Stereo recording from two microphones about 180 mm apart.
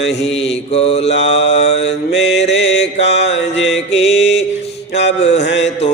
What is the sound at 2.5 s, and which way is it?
Mantra, 80° left.